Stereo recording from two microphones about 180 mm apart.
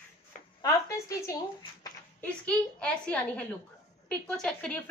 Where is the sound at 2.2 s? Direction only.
5° left (ahead or behind).